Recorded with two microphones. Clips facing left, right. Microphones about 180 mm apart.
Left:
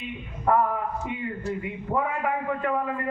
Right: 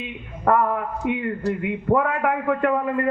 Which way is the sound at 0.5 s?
65° right (ahead or behind).